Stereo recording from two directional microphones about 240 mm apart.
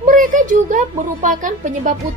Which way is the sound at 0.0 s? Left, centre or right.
Right.